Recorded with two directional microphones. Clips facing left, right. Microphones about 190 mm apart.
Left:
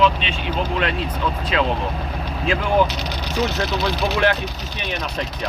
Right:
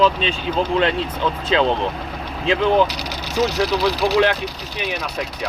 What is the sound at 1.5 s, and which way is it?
Speech, 30° right (ahead or behind).